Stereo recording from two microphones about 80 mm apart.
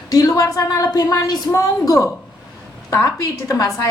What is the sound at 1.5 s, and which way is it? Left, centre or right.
A woman's voice, left.